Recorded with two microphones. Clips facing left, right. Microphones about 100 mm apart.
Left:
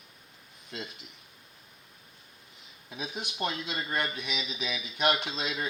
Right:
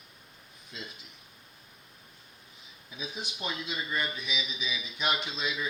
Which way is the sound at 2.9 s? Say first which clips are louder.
Left 2 dB; 65° left (ahead or behind).